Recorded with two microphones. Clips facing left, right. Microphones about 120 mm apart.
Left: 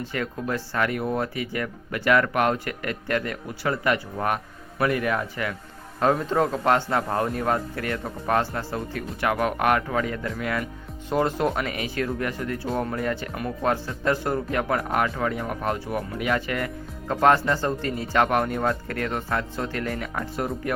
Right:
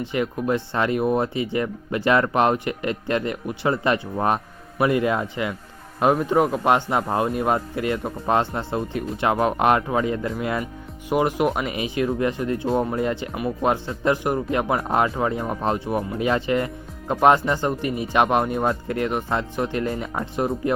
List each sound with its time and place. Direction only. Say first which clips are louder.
0.0 s speech: right 5 dB; 20° right (ahead or behind)
11.1 s speech: right 3 dB; 15° right (ahead or behind)
13.3 s speech: right 4 dB; 10° right (ahead or behind)
13.7 s speech: right 2 dB; 20° right (ahead or behind)